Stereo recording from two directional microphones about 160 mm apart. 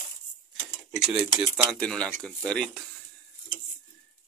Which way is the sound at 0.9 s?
5° right (ahead or behind).